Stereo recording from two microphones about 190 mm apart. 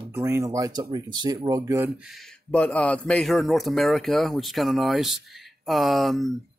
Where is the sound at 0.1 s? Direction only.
15° right (ahead or behind).